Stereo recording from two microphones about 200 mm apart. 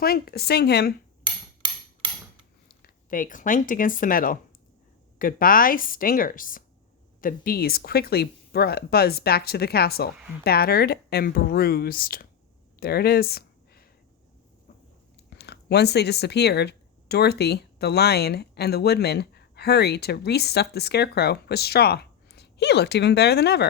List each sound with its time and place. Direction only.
0.0 s speech: 50° left (ahead or behind)
2.6 s speech: 45° left (ahead or behind)
12.8 s a sound: 50° left (ahead or behind)
15.3 s speech: 55° left (ahead or behind)